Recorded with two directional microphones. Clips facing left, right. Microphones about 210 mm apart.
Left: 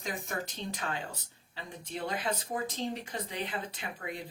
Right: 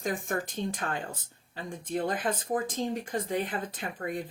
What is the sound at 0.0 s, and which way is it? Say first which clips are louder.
Speech: right 6 dB; 50° right (ahead or behind).